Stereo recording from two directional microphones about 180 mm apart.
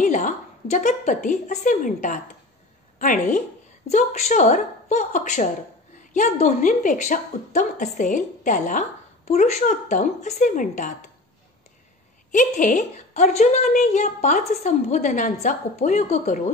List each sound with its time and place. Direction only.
0.0 s a woman's voice: 45° left (ahead or behind)
12.3 s a woman's voice: 45° left (ahead or behind)